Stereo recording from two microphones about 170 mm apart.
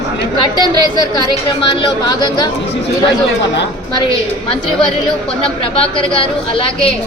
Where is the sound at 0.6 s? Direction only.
25° left (ahead or behind).